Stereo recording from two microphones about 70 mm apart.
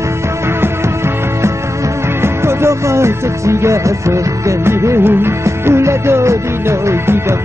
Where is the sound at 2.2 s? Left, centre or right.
Right.